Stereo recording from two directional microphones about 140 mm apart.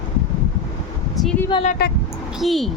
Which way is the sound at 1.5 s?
35° left (ahead or behind).